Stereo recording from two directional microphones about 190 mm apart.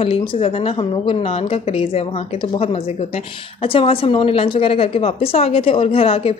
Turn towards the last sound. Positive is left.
turn(degrees=30)  # may be behind; listen again after turning